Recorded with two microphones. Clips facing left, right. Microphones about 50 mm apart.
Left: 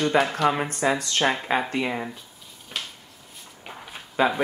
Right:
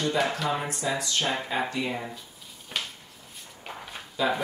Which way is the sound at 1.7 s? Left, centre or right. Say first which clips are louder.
Left 4 dB; left.